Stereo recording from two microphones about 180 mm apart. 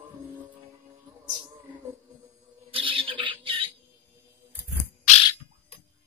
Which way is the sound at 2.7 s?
30° right (ahead or behind).